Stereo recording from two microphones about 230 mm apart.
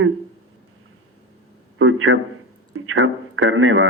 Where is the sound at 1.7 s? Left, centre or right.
Right.